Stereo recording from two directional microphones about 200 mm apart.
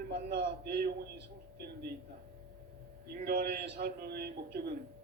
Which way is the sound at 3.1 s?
50° right (ahead or behind).